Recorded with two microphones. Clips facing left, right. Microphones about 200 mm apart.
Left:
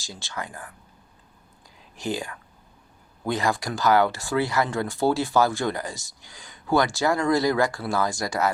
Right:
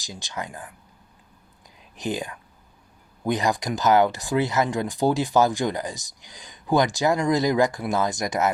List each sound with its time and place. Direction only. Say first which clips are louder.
0.0 s speech: right 1 dB; 15° right (ahead or behind)
1.8 s speech: right 1 dB; 20° right (ahead or behind)